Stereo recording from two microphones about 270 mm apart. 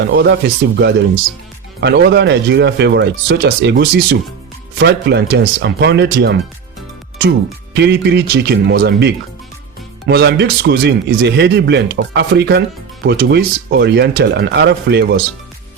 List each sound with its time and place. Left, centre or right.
0.0 s speech: right
1.8 s speech: right